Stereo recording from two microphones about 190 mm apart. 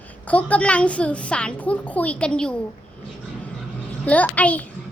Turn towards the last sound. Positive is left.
turn(degrees=5)  # may be behind; listen again after turning